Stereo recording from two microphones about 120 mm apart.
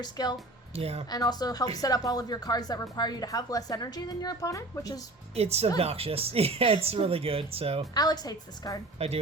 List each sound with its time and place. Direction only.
0.0 s a woman's voice: 35° left (ahead or behind)
0.7 s speech: 55° right (ahead or behind)
1.1 s a woman's voice: 35° left (ahead or behind)
5.3 s speech: 60° right (ahead or behind)
7.9 s a woman's voice: 35° left (ahead or behind)
9.0 s speech: 60° right (ahead or behind)